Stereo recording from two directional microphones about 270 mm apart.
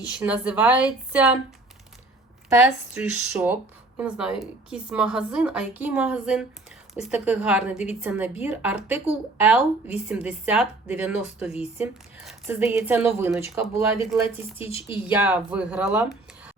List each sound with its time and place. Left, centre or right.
0.1 s speech: centre
2.6 s speech: centre
14.7 s speech: centre
15.1 s speech: centre